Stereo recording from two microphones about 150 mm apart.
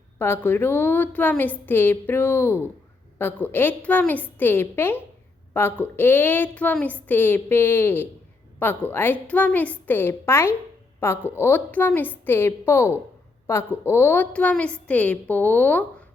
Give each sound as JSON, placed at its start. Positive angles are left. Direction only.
{"t": 0.2, "sound": "a woman's voice", "side_deg": 15}